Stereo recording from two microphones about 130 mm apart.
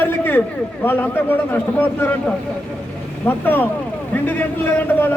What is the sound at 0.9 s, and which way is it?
A man's voice, 15° left (ahead or behind).